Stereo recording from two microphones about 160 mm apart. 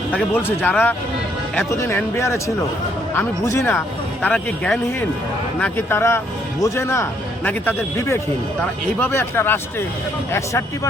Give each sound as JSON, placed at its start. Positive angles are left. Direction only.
{"t": 0.3, "sound": "a man's voice", "side_deg": 10}